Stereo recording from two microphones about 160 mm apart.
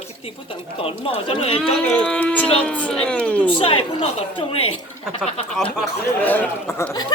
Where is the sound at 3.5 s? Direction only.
35° left (ahead or behind).